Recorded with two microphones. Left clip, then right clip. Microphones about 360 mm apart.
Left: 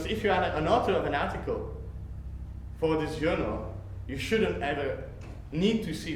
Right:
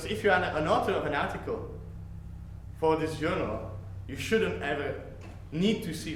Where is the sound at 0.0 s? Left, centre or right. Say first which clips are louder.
Right 1 dB; right.